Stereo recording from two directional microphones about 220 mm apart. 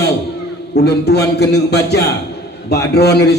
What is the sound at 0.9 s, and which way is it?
A man's voice, 50° left (ahead or behind).